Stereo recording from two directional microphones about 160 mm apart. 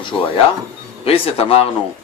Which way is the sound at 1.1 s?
35° left (ahead or behind).